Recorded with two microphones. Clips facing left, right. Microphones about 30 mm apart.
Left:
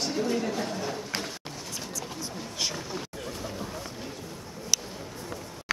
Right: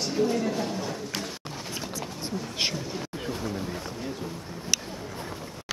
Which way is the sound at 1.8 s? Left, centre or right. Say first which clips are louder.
Right 1 dB; right.